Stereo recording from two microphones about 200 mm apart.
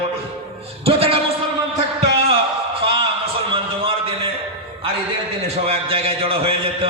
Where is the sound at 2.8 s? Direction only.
30° right (ahead or behind).